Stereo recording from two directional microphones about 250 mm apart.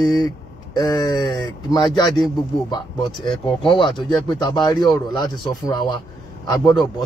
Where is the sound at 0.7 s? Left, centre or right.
Centre.